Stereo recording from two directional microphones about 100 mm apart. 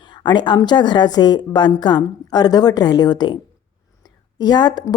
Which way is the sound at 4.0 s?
45° left (ahead or behind).